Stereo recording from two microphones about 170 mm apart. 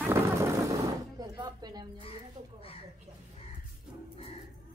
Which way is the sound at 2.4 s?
45° right (ahead or behind).